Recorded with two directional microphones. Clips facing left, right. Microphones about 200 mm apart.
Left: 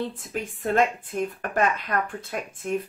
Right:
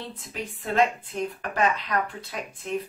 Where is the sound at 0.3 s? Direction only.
50° left (ahead or behind).